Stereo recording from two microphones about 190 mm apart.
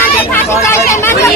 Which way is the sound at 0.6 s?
15° left (ahead or behind).